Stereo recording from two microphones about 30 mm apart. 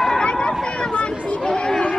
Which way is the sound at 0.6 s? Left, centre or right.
Left.